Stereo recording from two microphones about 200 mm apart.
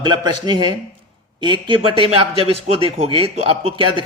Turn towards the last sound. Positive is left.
turn(degrees=-25)  # may be behind; listen again after turning